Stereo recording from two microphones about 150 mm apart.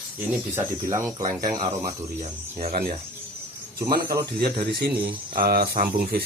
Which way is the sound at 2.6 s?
85° right.